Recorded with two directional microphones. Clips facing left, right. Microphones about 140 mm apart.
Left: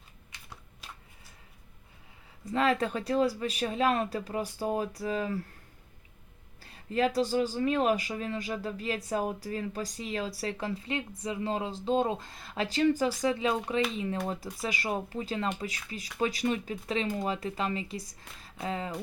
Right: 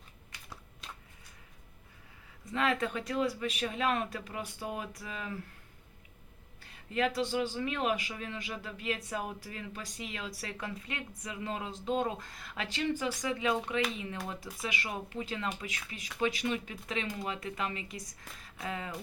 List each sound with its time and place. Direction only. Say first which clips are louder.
2.4 s speech: left 4 dB; 35° left (ahead or behind)
6.6 s speech: left 4 dB; 35° left (ahead or behind)